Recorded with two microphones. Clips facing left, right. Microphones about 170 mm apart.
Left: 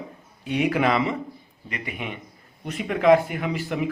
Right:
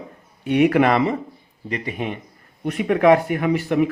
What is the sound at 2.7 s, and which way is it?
A man's voice, 55° right (ahead or behind).